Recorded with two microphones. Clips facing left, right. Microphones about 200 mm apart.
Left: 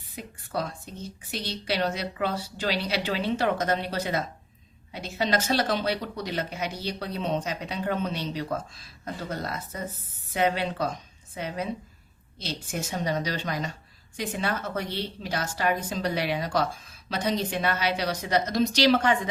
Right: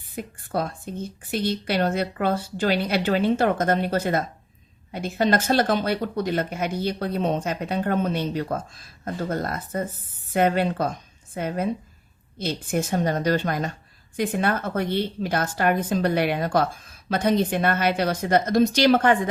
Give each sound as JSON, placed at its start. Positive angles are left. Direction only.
{"t": 0.2, "sound": "speech", "side_deg": -50}